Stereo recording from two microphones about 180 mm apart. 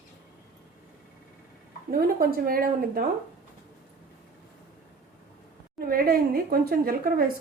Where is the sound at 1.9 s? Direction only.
55° right (ahead or behind).